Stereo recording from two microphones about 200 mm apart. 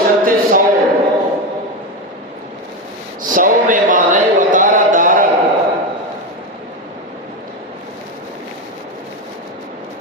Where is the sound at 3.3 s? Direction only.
40° right (ahead or behind).